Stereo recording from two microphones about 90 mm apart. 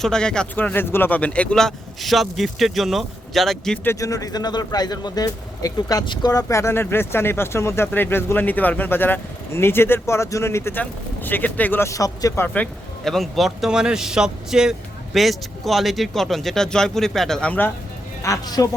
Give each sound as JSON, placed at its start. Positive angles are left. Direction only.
{"t": 0.0, "sound": "speech", "side_deg": 10}
{"t": 0.5, "sound": "a man's voice", "side_deg": 20}
{"t": 4.0, "sound": "speech", "side_deg": 40}
{"t": 11.9, "sound": "speech", "side_deg": 40}
{"t": 13.1, "sound": "a man's voice", "side_deg": 0}
{"t": 18.2, "sound": "speech", "side_deg": 40}